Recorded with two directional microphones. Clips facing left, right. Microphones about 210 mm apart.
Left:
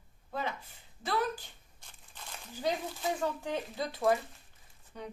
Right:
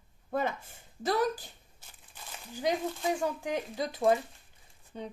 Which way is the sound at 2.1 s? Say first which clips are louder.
Right 2 dB; 5° right (ahead or behind).